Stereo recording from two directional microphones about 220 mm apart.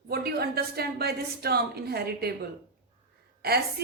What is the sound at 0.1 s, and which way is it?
Speech, 45° right (ahead or behind).